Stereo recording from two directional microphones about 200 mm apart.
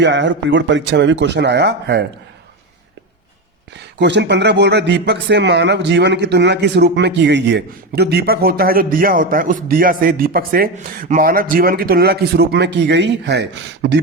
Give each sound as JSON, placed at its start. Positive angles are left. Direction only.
{"t": 0.0, "sound": "speech", "side_deg": -65}
{"t": 3.9, "sound": "a man's voice", "side_deg": -60}